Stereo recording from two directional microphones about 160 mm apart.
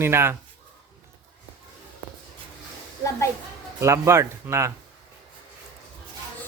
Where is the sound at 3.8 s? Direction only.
15° right (ahead or behind).